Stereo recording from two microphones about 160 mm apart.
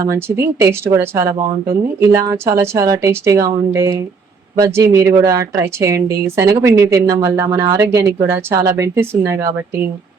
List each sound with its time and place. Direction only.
0.0 s a woman's voice: 20° right (ahead or behind)